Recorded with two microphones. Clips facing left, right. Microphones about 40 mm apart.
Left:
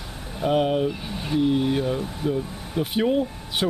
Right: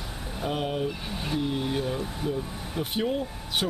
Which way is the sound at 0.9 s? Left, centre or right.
Centre.